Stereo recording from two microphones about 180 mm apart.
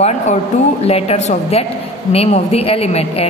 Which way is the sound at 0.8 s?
35° left (ahead or behind).